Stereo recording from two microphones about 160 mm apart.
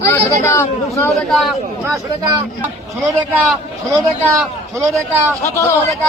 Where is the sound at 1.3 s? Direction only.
Centre (ahead or behind).